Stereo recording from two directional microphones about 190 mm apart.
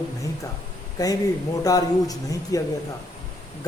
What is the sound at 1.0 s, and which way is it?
A man's voice, 20° left (ahead or behind).